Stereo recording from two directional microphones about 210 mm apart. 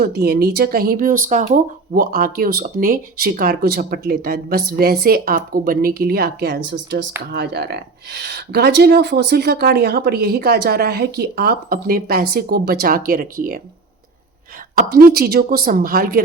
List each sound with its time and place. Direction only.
0.0 s speech: 50° right (ahead or behind)
14.8 s speech: 45° right (ahead or behind)